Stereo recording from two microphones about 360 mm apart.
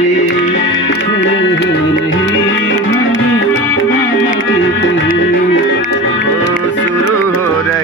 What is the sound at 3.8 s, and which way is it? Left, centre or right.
Music, left.